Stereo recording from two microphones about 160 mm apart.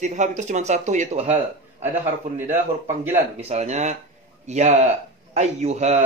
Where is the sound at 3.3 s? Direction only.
45° right (ahead or behind).